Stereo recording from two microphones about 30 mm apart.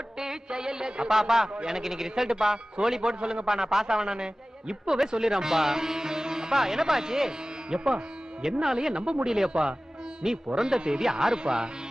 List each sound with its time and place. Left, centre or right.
0.2 s music: right
1.1 s a man's voice: centre